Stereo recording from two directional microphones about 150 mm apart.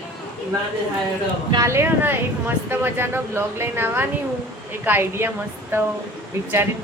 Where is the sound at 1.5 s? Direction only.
20° right (ahead or behind).